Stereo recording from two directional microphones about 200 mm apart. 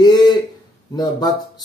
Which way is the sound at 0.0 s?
20° left (ahead or behind).